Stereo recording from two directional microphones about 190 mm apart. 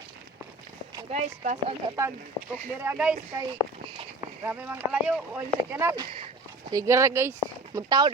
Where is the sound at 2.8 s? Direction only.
5° right (ahead or behind).